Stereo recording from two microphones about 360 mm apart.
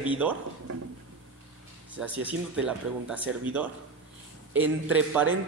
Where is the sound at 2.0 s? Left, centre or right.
Centre.